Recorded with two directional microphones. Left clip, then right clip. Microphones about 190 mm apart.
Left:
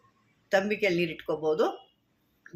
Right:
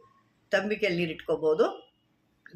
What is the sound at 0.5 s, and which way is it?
A woman's voice, 15° left (ahead or behind).